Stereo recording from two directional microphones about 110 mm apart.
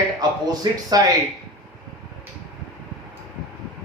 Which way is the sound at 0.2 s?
35° right (ahead or behind).